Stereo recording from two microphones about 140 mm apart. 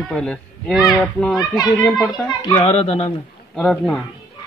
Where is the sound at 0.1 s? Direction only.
5° left (ahead or behind).